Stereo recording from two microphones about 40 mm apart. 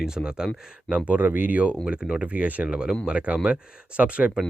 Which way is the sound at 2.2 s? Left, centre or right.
Right.